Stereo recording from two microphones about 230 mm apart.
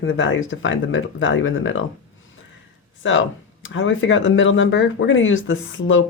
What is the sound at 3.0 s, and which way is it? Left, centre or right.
Speech, left.